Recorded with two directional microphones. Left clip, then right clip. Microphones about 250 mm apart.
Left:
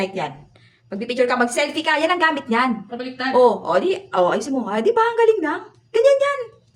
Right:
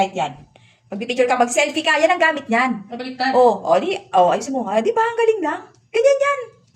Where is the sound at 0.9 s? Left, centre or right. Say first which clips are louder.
Right 1 dB; centre.